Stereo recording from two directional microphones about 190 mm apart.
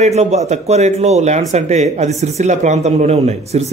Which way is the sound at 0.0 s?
35° right (ahead or behind).